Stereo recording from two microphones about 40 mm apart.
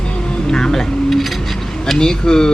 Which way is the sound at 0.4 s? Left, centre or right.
Centre.